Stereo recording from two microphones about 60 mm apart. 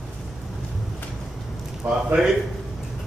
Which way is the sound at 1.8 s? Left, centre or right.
Right.